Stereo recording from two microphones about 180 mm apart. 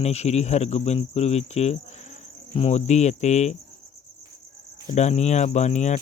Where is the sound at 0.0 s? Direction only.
35° left (ahead or behind).